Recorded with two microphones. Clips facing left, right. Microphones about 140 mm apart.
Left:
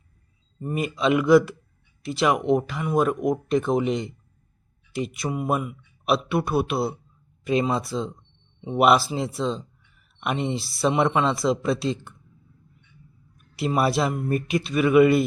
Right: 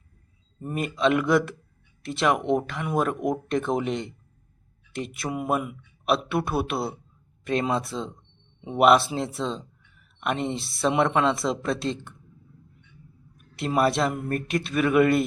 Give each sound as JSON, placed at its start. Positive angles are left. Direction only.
{"t": 0.6, "sound": "speech", "side_deg": 0}
{"t": 13.6, "sound": "speech", "side_deg": 5}